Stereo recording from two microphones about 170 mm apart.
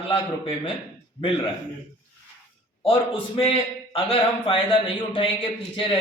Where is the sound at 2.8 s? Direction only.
30° left (ahead or behind).